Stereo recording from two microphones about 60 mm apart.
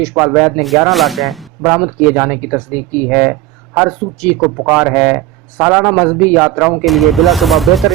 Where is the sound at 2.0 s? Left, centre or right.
Right.